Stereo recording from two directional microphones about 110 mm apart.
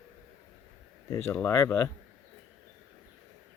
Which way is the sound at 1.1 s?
25° left (ahead or behind).